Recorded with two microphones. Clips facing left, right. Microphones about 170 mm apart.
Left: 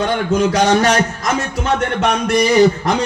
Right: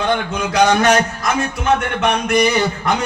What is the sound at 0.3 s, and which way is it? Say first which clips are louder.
A man's voice: left 2 dB; 35° left (ahead or behind).